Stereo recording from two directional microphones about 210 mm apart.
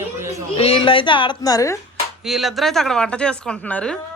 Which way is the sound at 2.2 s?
Centre (ahead or behind).